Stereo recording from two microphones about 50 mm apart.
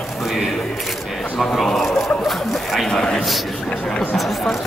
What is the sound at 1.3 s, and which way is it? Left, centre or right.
Speech, centre.